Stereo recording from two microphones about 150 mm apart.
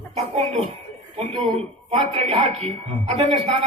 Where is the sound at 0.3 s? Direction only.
45° right (ahead or behind).